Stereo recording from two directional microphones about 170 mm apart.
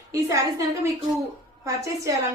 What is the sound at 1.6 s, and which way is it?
Speech, 20° right (ahead or behind).